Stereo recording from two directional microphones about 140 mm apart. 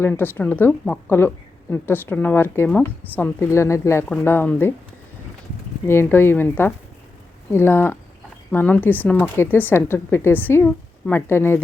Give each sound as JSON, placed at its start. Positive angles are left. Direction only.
{"t": 0.0, "sound": "speech", "side_deg": 15}
{"t": 5.9, "sound": "speech", "side_deg": 15}